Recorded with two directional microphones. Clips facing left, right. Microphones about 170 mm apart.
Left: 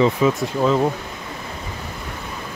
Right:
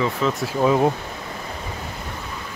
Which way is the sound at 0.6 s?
15° right (ahead or behind).